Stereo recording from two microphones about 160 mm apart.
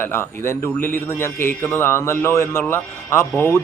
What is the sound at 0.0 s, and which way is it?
A man's voice, 15° left (ahead or behind).